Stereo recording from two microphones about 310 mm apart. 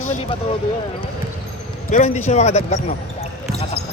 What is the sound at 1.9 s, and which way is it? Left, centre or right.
Speech, left.